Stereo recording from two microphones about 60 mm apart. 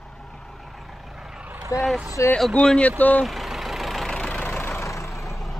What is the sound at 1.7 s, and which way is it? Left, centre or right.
Speech, left.